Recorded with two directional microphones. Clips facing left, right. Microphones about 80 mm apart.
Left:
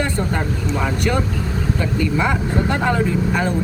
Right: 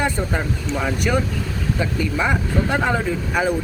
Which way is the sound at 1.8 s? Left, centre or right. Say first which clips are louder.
Left 2 dB; centre.